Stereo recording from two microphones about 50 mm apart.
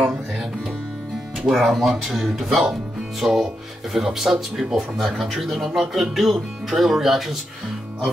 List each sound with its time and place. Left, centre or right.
1.4 s speech: centre